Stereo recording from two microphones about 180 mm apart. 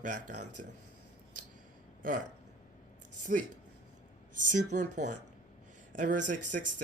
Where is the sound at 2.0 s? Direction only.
50° right (ahead or behind).